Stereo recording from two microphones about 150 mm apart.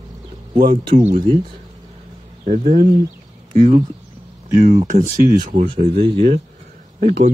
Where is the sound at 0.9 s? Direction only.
50° right (ahead or behind).